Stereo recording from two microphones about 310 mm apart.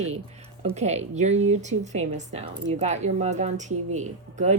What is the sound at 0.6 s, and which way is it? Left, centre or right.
Speech, right.